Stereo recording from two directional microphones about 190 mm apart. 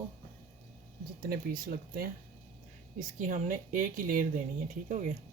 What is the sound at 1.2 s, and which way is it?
Speech, 50° right (ahead or behind).